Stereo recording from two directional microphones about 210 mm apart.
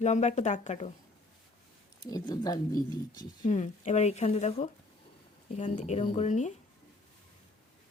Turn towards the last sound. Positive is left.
turn(degrees=35)  # may be behind; listen again after turning